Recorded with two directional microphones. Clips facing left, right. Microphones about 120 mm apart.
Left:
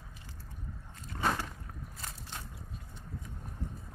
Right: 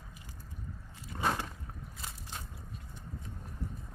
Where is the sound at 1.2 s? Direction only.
15° right (ahead or behind).